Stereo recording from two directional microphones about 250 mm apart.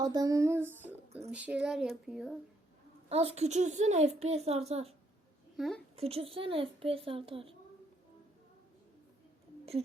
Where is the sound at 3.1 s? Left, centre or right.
Right.